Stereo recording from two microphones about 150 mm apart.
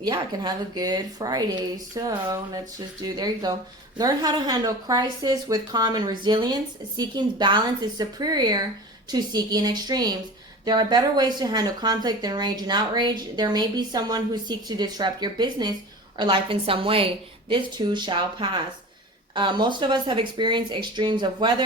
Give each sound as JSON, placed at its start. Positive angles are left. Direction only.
{"t": 0.0, "sound": "speech", "side_deg": -30}